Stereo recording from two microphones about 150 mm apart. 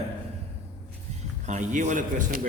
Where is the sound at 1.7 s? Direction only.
55° right (ahead or behind).